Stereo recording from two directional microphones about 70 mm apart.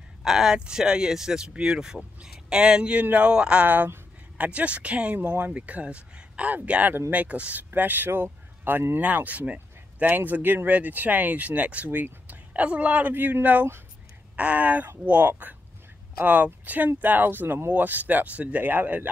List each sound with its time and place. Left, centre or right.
0.2 s speech: centre
3.6 s speech: right